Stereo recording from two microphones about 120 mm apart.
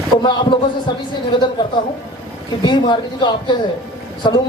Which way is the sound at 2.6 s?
40° left (ahead or behind).